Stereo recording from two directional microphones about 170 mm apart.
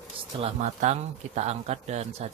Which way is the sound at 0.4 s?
45° right (ahead or behind).